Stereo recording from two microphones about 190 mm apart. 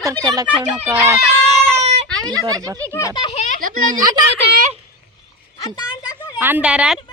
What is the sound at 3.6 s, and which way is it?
Speech, 45° right (ahead or behind).